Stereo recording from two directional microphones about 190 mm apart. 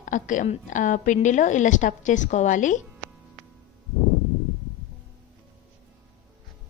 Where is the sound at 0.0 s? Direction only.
45° left (ahead or behind).